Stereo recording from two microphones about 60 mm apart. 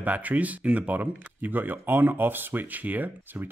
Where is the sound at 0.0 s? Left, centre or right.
Right.